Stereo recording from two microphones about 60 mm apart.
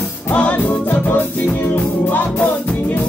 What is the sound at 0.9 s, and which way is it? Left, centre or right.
Music, left.